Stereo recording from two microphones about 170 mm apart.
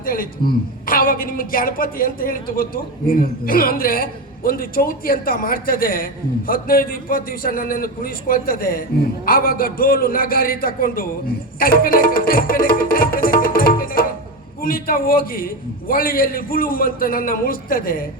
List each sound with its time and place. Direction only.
0.0 s a man's voice: 55° left (ahead or behind)
11.6 s music: 60° left (ahead or behind)
14.6 s a man's voice: 60° left (ahead or behind)